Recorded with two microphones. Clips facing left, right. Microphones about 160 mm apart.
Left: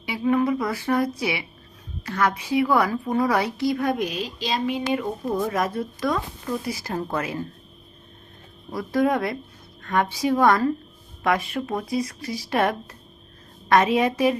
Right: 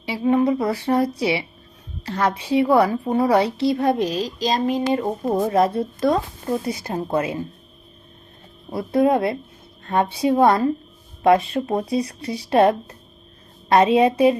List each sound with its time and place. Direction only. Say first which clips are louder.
0.0 s a woman's voice: right 3 dB; 30° right (ahead or behind)
6.7 s speech: right 3 dB; 25° right (ahead or behind)
8.7 s speech: right 4 dB; 25° right (ahead or behind)